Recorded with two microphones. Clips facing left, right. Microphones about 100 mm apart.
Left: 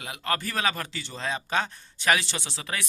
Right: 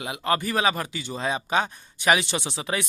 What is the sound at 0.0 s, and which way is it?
Speech, 20° right (ahead or behind).